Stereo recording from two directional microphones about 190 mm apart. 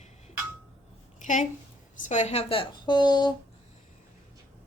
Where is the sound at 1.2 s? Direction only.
40° left (ahead or behind); by 3.3 s 25° left (ahead or behind).